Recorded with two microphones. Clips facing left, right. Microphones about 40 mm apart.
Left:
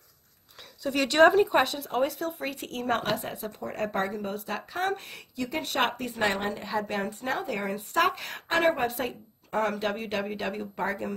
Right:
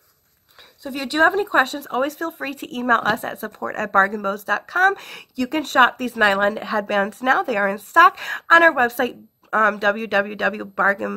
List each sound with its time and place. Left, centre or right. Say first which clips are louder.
0.8 s speech: right 2 dB; centre
1.3 s speech: right 2 dB; right
1.6 s speech: right 6 dB; right
2.0 s speech: right 5 dB; right
5.6 s speech: right 12 dB; right
7.6 s speech: right 12 dB; right